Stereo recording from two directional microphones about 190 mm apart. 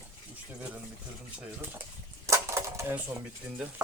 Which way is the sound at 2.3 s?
15° right (ahead or behind).